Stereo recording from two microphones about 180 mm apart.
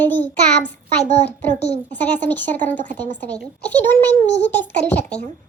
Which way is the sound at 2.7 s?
45° right (ahead or behind).